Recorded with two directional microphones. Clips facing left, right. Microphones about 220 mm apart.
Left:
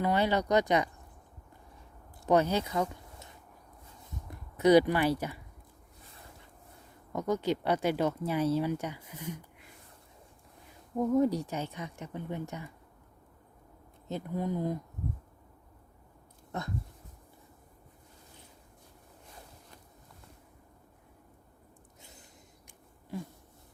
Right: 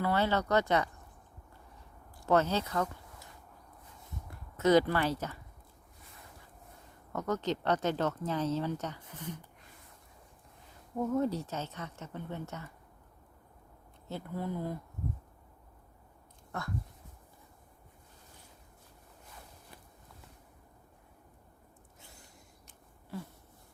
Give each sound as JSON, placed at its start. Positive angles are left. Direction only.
{"t": 0.0, "sound": "speech", "side_deg": 15}
{"t": 2.2, "sound": "speech", "side_deg": 15}
{"t": 4.3, "sound": "speech", "side_deg": 15}
{"t": 7.1, "sound": "speech", "side_deg": 10}
{"t": 10.9, "sound": "speech", "side_deg": 15}
{"t": 14.1, "sound": "speech", "side_deg": 15}
{"t": 16.5, "sound": "speech", "side_deg": 20}
{"t": 22.6, "sound": "a sound", "side_deg": 15}